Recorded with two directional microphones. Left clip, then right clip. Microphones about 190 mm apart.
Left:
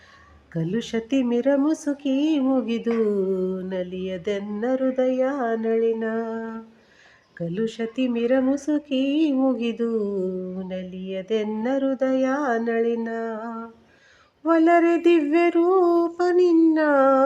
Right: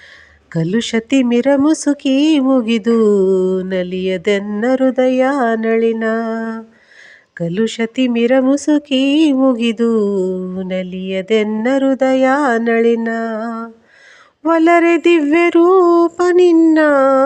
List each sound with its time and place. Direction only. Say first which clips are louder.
0.5 s speech: right 9 dB; 40° right (ahead or behind)